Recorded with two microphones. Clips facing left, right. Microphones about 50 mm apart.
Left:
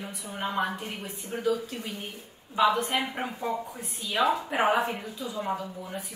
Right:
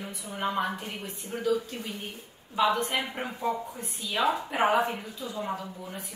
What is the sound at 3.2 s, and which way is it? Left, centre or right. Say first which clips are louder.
Speech: left 2 dB; left.